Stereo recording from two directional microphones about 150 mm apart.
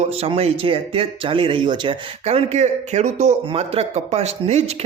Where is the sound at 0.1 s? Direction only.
40° right (ahead or behind).